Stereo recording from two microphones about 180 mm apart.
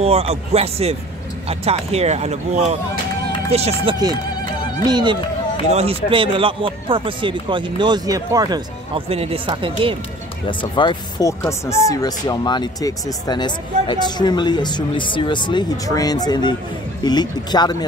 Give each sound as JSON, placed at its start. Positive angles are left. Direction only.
{"t": 0.0, "sound": "speech", "side_deg": -35}
{"t": 9.1, "sound": "speech", "side_deg": -35}
{"t": 10.4, "sound": "speech", "side_deg": 25}